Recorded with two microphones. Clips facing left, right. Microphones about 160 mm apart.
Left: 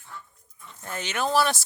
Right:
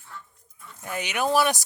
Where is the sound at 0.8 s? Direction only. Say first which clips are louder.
Right 2 dB; 15° right (ahead or behind).